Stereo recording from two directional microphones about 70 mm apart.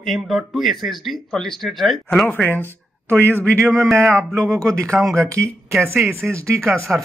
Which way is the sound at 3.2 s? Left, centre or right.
Left.